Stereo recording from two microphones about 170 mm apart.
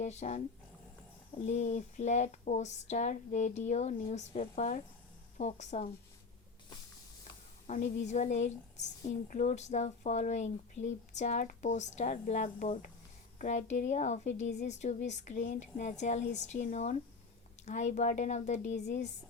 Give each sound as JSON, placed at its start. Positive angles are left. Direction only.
{"t": 0.0, "sound": "speech", "side_deg": 45}
{"t": 1.5, "sound": "speech", "side_deg": 45}
{"t": 7.7, "sound": "speech", "side_deg": 45}